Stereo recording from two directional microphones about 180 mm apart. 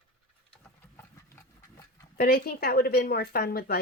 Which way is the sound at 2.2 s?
55° left (ahead or behind).